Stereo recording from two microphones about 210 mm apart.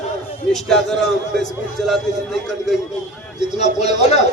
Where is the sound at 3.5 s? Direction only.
30° left (ahead or behind).